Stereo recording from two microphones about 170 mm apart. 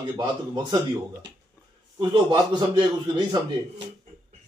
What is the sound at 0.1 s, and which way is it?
Speech, 25° right (ahead or behind).